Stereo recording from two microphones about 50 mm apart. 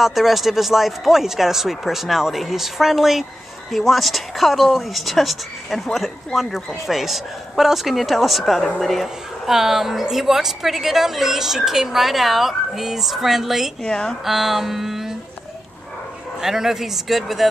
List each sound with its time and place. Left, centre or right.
0.0 s speech: centre
9.0 s a woman's voice: centre
13.8 s speech: centre
14.2 s speech: centre
16.3 s a woman's voice: centre